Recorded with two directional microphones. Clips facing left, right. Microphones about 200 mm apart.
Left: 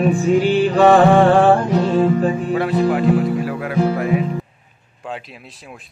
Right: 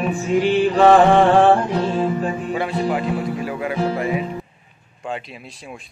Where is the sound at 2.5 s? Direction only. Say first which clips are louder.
Left 4 dB; centre (ahead or behind).